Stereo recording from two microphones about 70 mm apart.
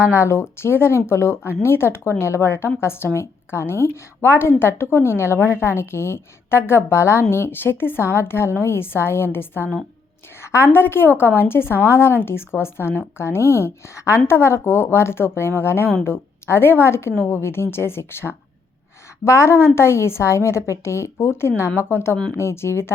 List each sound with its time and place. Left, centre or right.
0.0 s a woman's voice: left